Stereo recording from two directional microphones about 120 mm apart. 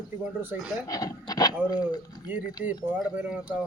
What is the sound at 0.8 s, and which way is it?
Speech, 30° left (ahead or behind).